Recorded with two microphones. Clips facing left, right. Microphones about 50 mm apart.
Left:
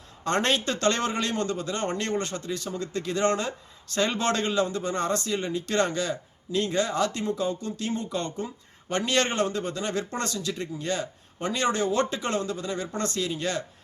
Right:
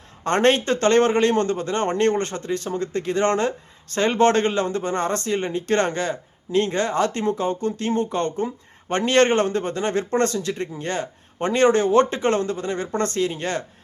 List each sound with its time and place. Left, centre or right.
0.3 s speech: right